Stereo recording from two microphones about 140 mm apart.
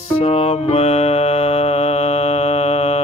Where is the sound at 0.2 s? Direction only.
45° left (ahead or behind).